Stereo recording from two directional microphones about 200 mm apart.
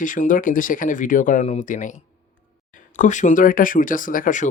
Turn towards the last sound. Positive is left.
turn(degrees=40)  # may be behind; listen again after turning